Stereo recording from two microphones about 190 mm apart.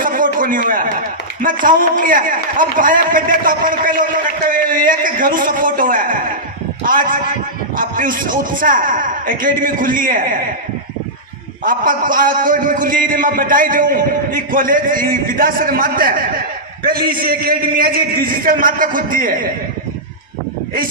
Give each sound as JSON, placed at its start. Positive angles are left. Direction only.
{"t": 0.0, "sound": "a sound", "side_deg": -45}
{"t": 0.3, "sound": "a man's voice", "side_deg": -45}
{"t": 11.6, "sound": "a man's voice", "side_deg": -45}